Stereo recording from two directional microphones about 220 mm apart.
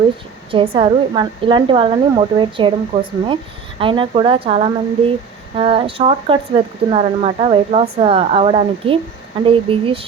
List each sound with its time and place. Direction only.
0.5 s a woman's voice: 25° right (ahead or behind)